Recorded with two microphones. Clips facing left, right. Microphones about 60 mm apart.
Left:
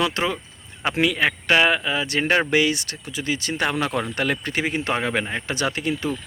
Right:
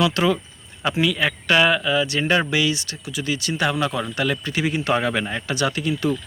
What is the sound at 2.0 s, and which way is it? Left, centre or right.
A man's voice, left.